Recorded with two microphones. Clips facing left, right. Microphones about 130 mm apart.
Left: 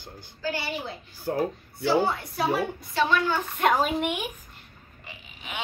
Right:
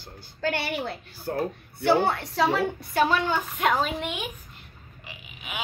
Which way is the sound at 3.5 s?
5° left (ahead or behind).